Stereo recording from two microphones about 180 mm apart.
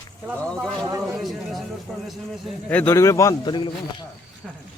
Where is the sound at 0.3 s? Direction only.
5° left (ahead or behind).